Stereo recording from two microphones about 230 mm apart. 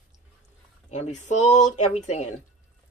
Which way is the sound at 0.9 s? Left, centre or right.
Left.